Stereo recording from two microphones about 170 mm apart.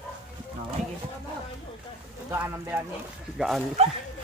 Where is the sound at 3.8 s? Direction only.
40° right (ahead or behind).